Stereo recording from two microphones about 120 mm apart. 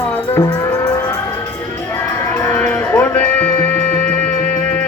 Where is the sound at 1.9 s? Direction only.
20° left (ahead or behind).